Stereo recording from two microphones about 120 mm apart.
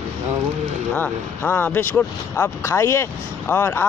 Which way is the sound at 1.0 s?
15° left (ahead or behind).